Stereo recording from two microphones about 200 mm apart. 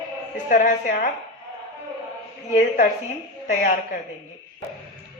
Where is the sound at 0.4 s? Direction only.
40° left (ahead or behind).